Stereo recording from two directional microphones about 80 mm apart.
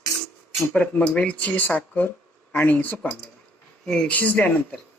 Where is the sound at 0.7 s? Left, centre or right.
Centre.